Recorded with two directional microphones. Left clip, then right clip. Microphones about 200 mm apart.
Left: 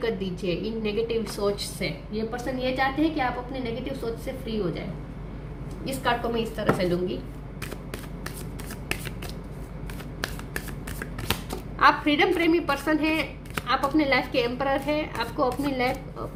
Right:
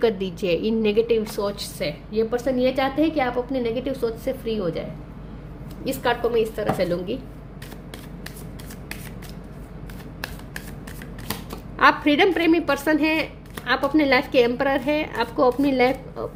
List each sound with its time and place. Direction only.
0.0 s a woman's voice: 55° right (ahead or behind)
5.8 s a woman's voice: 50° right (ahead or behind)
11.8 s a woman's voice: 50° right (ahead or behind)